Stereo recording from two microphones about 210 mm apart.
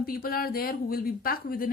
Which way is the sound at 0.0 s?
45° left (ahead or behind).